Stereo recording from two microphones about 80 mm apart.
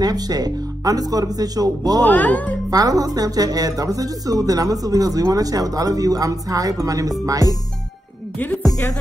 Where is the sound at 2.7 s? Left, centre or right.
Right.